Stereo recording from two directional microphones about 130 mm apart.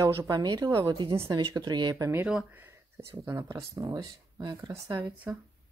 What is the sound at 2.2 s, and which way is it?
Speech, 10° right (ahead or behind).